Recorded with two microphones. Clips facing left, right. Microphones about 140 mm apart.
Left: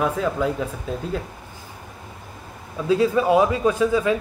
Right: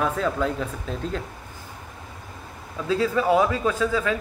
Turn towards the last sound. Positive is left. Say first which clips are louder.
# left 4 dB
turn(degrees=20)  # may be behind; listen again after turning